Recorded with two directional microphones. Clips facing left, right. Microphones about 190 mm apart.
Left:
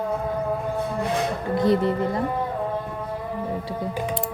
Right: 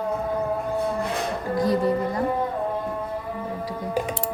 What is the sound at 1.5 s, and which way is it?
Music, 25° left (ahead or behind).